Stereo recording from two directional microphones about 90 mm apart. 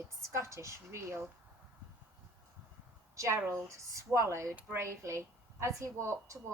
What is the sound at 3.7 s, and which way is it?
A woman's voice, 35° right (ahead or behind).